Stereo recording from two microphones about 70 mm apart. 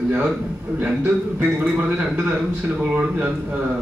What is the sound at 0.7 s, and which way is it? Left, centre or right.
A man's voice, right.